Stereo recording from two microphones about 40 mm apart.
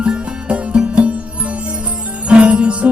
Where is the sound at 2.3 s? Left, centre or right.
Right.